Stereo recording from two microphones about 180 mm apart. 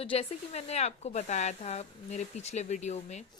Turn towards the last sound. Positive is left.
turn(degrees=40)  # may be behind; listen again after turning